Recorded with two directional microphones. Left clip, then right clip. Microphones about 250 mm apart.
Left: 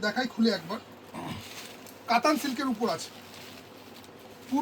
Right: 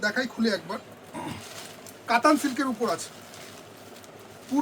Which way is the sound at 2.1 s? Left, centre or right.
Right.